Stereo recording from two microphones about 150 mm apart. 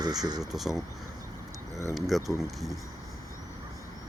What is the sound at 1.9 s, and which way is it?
Speech, centre (ahead or behind).